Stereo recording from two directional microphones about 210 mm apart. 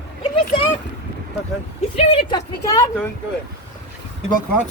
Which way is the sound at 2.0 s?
20° left (ahead or behind).